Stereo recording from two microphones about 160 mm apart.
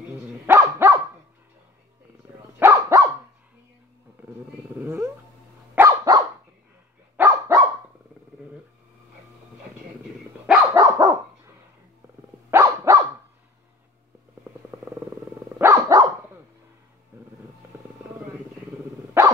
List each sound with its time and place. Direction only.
0.5 s dog: 15° right (ahead or behind)
2.6 s dog: 20° right (ahead or behind)
4.7 s cat: 15° right (ahead or behind)
5.8 s dog: 20° right (ahead or behind)
10.7 s dog: 20° right (ahead or behind)
12.4 s dog: 20° right (ahead or behind)
15.6 s dog: 20° right (ahead or behind)
17.1 s vehicle: 15° right (ahead or behind)
19.2 s dog: 15° right (ahead or behind)